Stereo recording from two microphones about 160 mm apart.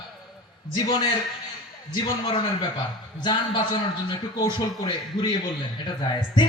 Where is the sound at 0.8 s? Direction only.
25° left (ahead or behind).